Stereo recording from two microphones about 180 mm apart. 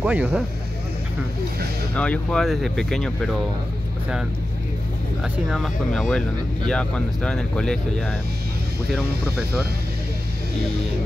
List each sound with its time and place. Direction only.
0.0 s speech: 10° right (ahead or behind)
2.0 s speech: 5° left (ahead or behind)
5.2 s speech: centre (ahead or behind)